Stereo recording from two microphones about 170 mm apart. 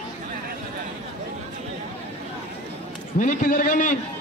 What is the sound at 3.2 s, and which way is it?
Speech, 50° left (ahead or behind).